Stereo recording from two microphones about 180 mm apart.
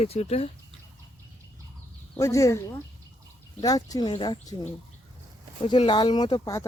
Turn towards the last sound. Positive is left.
turn(degrees=20)  # may be behind; listen again after turning